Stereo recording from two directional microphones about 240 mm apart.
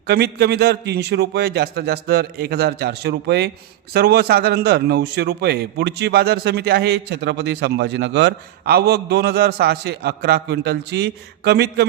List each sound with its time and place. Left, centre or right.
0.1 s a man's voice: right